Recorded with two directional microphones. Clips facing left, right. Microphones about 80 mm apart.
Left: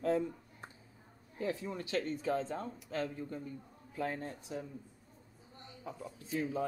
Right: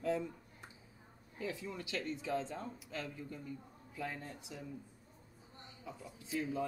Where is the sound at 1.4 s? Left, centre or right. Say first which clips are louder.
Left 5 dB; left.